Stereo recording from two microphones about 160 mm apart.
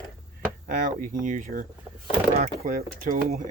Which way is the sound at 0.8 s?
55° right (ahead or behind).